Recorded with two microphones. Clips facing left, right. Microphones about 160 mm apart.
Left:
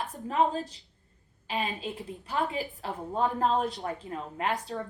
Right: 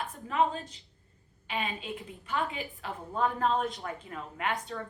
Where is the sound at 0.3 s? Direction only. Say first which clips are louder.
Left 2 dB; 35° left (ahead or behind).